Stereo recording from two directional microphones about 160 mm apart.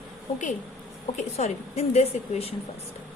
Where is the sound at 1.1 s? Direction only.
45° left (ahead or behind).